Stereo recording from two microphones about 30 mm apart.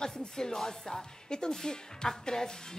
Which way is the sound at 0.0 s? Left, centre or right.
Left.